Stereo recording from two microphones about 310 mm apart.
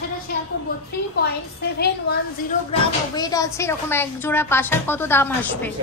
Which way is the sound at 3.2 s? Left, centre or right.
Centre.